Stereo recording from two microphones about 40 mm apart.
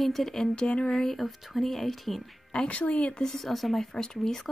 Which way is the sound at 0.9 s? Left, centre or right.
Centre.